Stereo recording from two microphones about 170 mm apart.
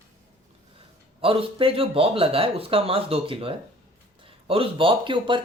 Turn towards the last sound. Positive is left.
turn(degrees=-30)  # may be behind; listen again after turning